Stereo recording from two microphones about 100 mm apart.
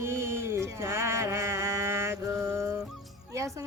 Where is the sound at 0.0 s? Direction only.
25° right (ahead or behind).